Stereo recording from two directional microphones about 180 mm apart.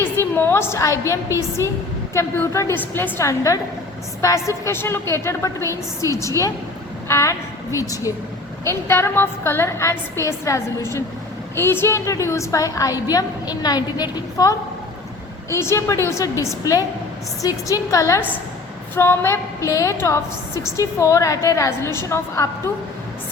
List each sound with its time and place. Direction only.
0.0 s a woman's voice: 10° left (ahead or behind)